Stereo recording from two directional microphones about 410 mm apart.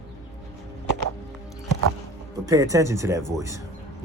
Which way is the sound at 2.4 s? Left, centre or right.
Centre.